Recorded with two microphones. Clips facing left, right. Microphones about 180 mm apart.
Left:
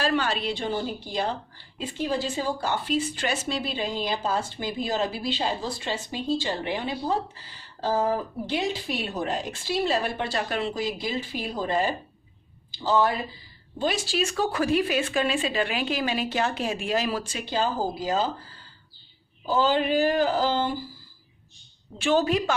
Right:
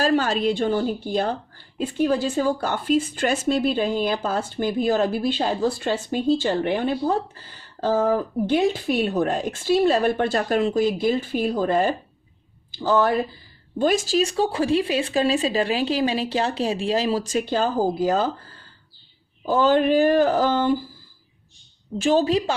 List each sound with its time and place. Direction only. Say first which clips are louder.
0.0 s speech: right 5 dB; 45° right (ahead or behind)
19.5 s speech: right 5 dB; 50° right (ahead or behind)
22.0 s speech: right 3 dB; 35° right (ahead or behind)